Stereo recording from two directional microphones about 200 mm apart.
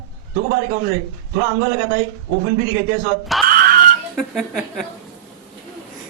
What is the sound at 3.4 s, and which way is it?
Music, 45° right (ahead or behind).